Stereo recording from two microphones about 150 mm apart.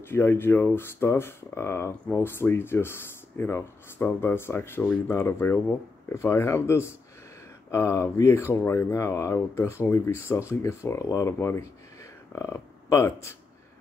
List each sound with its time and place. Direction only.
0.0 s speech: 15° left (ahead or behind)